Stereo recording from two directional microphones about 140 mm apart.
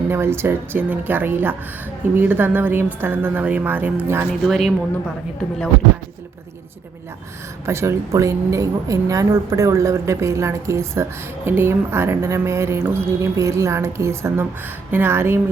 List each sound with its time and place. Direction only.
0.1 s a woman's voice: 15° right (ahead or behind)
4.3 s a woman's voice: centre (ahead or behind)
7.6 s a woman's voice: 20° right (ahead or behind)